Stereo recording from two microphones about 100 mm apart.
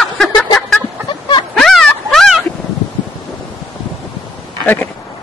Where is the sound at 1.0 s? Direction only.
50° left (ahead or behind).